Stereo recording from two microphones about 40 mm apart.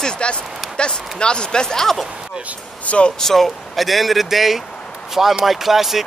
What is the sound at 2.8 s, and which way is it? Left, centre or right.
Speech, left.